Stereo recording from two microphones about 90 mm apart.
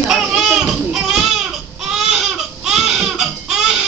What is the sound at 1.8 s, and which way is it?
Baby cry, 5° right (ahead or behind).